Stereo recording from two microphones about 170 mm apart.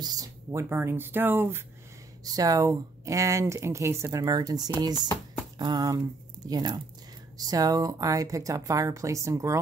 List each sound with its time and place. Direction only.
0.0 s speech: 20° right (ahead or behind)